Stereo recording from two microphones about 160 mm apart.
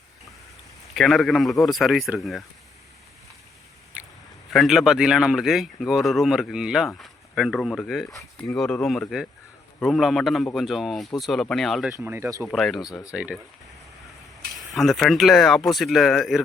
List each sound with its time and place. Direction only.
0.9 s speech: centre (ahead or behind)
4.5 s speech: centre (ahead or behind)
12.0 s speech: 15° right (ahead or behind)
12.5 s speech: centre (ahead or behind)
12.8 s speech: 25° left (ahead or behind)
14.5 s speech: centre (ahead or behind)